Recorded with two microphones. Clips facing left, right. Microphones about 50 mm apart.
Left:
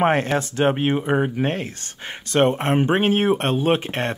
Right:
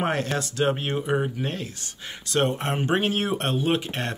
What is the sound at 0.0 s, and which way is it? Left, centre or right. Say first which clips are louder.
Speech: left 7 dB; left.